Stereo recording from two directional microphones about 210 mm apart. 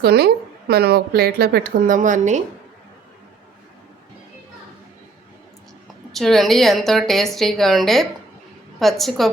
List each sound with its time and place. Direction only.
0.0 s speech: 50° right (ahead or behind)
6.1 s a woman's voice: centre (ahead or behind)